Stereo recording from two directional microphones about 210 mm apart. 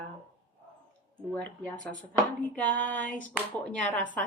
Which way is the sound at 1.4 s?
5° left (ahead or behind).